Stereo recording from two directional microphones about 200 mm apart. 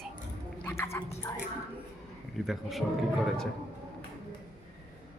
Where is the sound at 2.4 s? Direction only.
Centre (ahead or behind).